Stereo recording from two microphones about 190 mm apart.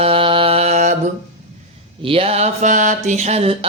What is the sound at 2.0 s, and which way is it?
Mantra, 30° right (ahead or behind).